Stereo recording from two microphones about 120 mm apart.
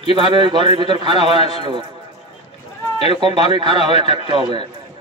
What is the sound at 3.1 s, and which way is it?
A man's voice, 45° right (ahead or behind).